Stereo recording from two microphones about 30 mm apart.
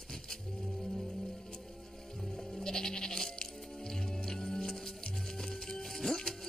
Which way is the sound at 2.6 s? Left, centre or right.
Left.